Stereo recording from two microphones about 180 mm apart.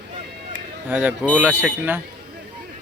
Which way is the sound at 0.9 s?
10° right (ahead or behind).